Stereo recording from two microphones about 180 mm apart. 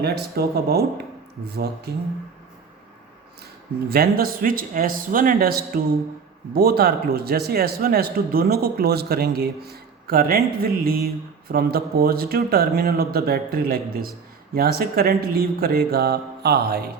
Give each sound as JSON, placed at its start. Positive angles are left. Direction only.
{"t": 0.0, "sound": "a man's voice", "side_deg": -65}
{"t": 3.8, "sound": "a man's voice", "side_deg": -60}